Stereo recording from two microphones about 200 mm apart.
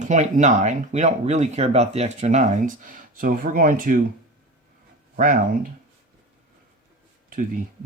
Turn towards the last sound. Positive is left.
turn(degrees=-40)  # may be behind; listen again after turning